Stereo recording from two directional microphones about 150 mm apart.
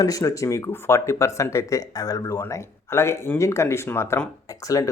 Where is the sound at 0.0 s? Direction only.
25° left (ahead or behind).